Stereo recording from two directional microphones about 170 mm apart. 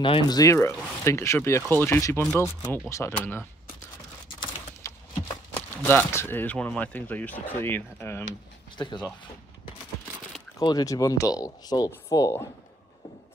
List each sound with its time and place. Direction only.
0.0 s speech: 25° left (ahead or behind)
4.8 s a sound: 20° left (ahead or behind)
5.8 s speech: 10° left (ahead or behind)
8.7 s speech: 25° left (ahead or behind)
10.6 s speech: 25° left (ahead or behind)